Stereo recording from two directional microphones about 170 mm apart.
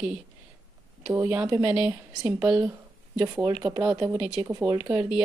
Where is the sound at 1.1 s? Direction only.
10° right (ahead or behind).